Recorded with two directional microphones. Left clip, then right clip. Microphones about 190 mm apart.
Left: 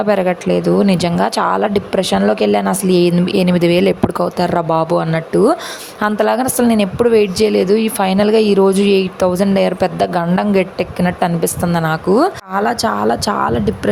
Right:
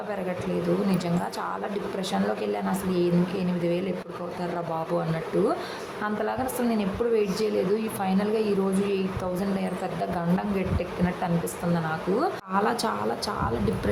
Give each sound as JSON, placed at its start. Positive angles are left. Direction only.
{"t": 0.9, "sound": "a woman's voice", "side_deg": 45}
{"t": 12.5, "sound": "speech", "side_deg": 30}